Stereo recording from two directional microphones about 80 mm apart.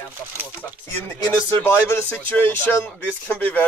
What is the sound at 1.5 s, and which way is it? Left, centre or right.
Speech, left.